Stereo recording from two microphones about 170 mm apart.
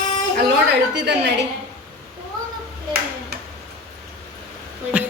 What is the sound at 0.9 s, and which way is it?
Speech, 90° right.